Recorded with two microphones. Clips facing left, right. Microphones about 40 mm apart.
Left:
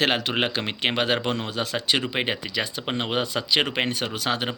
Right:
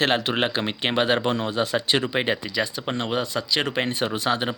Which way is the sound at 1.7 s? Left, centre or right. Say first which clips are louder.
Left 1 dB; centre.